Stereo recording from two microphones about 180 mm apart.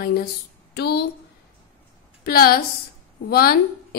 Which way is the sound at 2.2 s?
55° left (ahead or behind).